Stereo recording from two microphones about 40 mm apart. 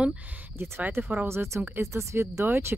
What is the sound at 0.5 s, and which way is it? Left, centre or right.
Speech, right.